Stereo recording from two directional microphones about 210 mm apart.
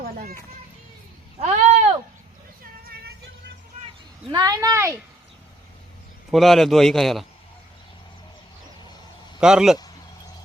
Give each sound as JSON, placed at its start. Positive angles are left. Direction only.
{"t": 0.0, "sound": "children playing", "side_deg": -45}
{"t": 1.4, "sound": "a sound", "side_deg": -30}
{"t": 2.8, "sound": "vehicle", "side_deg": -45}
{"t": 4.3, "sound": "speech", "side_deg": -15}
{"t": 6.3, "sound": "a man's voice", "side_deg": 0}
{"t": 9.4, "sound": "a man's voice", "side_deg": -5}